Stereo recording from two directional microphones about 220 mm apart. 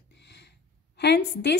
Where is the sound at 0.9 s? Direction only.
50° left (ahead or behind).